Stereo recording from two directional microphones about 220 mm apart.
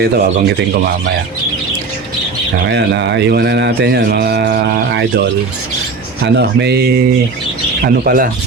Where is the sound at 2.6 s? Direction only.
50° right (ahead or behind).